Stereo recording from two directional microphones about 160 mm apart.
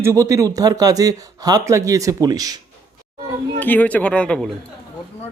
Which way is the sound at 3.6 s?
10° left (ahead or behind).